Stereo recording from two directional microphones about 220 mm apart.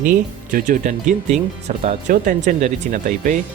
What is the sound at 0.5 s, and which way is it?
Speech, 35° right (ahead or behind).